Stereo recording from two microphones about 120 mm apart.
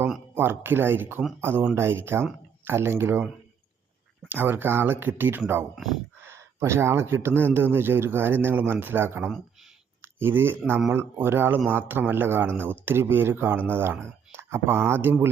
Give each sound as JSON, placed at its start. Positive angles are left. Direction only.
{"t": 0.3, "sound": "a man's voice", "side_deg": -20}
{"t": 4.3, "sound": "a man's voice", "side_deg": -15}